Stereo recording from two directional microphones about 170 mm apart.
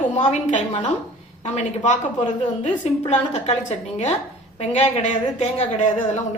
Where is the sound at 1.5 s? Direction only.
45° left (ahead or behind).